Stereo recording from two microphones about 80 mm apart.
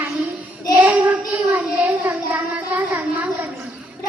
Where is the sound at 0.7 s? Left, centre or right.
Centre.